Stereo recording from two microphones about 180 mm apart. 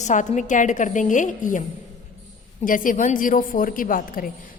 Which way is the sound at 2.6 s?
50° left (ahead or behind).